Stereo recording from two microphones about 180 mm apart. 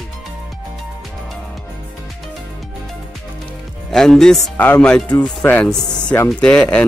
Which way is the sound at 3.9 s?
5° left (ahead or behind).